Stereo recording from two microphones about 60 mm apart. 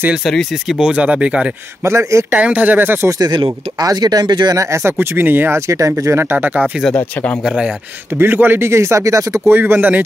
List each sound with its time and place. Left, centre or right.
0.2 s speech: centre
0.7 s speech: centre
1.9 s speech: right
2.3 s speech: right
3.8 s speech: right
4.6 s speech: right
5.7 s speech: right
6.3 s speech: right
7.4 s speech: centre
8.2 s speech: right
8.6 s speech: right
9.5 s speech: right